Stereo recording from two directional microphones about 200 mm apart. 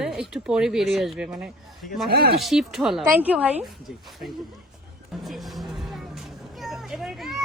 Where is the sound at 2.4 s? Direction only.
Centre (ahead or behind).